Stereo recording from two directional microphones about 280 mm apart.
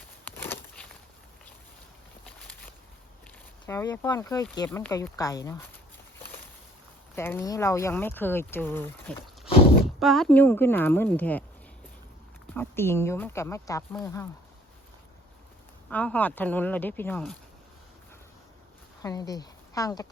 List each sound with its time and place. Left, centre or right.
0.3 s a sound: centre
2.2 s a sound: centre
3.7 s speech: centre
7.2 s speech: centre
9.5 s a sound: left
10.0 s speech: centre
12.5 s speech: centre
15.9 s speech: centre
19.0 s speech: centre